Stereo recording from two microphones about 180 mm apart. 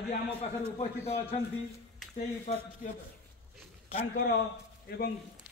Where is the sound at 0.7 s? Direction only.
35° left (ahead or behind).